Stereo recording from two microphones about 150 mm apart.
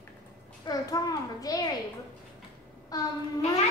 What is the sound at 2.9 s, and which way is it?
Child singing, 25° left (ahead or behind).